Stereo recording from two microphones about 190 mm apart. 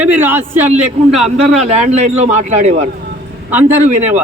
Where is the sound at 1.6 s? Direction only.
35° right (ahead or behind).